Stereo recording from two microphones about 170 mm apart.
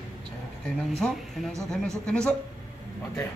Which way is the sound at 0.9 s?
5° left (ahead or behind).